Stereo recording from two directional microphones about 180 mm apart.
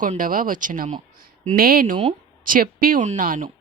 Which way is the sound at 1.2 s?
55° right (ahead or behind).